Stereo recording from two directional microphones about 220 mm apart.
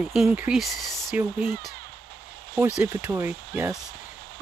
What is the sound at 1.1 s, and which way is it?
Speech, 5° right (ahead or behind).